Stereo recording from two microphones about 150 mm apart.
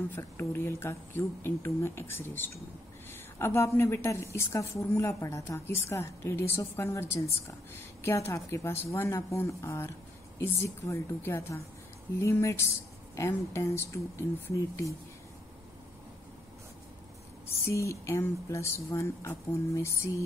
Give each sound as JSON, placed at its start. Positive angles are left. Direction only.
{"t": 0.1, "sound": "a woman's voice", "side_deg": 15}
{"t": 17.6, "sound": "speech", "side_deg": 20}